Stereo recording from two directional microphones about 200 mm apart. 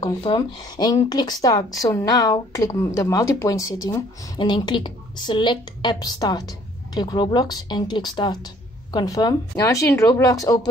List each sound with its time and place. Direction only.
0.0 s a woman's voice: 25° left (ahead or behind)